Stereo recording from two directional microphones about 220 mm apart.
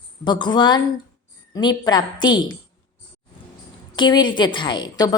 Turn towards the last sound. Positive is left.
turn(degrees=20)  # may be behind; listen again after turning